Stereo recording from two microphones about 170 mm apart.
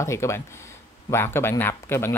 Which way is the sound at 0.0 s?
15° left (ahead or behind).